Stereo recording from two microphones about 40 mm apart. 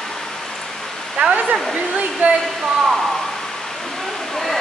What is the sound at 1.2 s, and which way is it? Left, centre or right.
Speech, right.